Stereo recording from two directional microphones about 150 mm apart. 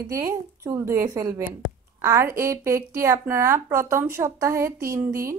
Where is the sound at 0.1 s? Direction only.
20° right (ahead or behind).